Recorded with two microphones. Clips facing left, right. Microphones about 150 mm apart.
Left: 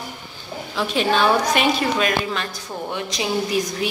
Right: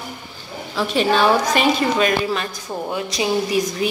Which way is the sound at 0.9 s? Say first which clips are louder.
Right 2 dB; 5° right (ahead or behind).